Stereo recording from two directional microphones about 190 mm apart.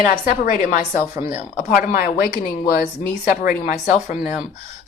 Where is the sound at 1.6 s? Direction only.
45° left (ahead or behind).